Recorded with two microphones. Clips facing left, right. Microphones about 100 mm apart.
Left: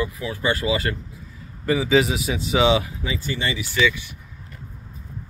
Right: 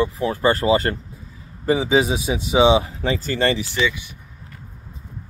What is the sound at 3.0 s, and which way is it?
Speech, 50° right (ahead or behind).